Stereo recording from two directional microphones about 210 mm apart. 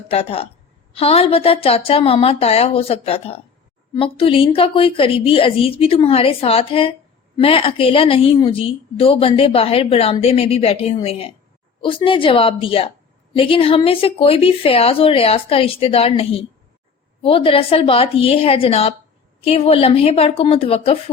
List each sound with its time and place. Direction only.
0.1 s a woman's voice: 25° left (ahead or behind)